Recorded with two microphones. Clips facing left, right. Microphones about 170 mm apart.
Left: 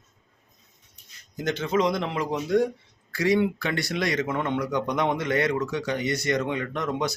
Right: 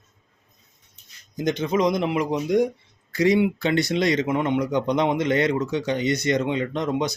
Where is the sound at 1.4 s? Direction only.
15° right (ahead or behind).